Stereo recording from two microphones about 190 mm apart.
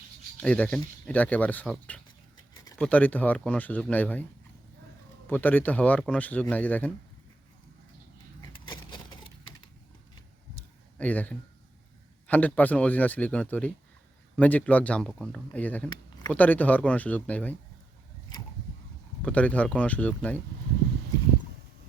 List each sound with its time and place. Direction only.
0.3 s speech: 5° left (ahead or behind)
5.3 s speech: 10° left (ahead or behind)
8.4 s vehicle: 25° left (ahead or behind)
10.9 s speech: 10° left (ahead or behind)
19.2 s speech: 5° left (ahead or behind)